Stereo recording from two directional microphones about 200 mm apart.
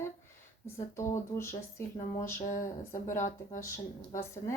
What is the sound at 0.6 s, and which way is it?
Speech, 15° left (ahead or behind).